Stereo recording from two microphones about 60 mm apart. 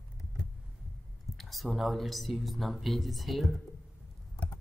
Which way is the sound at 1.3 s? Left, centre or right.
Centre.